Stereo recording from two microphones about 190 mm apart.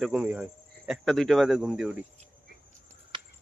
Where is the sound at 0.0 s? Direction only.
5° right (ahead or behind).